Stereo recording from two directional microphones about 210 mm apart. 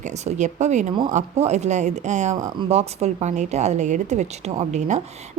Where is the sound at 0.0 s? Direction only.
35° right (ahead or behind).